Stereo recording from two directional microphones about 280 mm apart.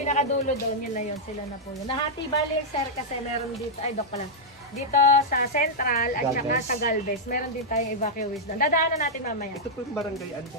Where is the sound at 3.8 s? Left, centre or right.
Left.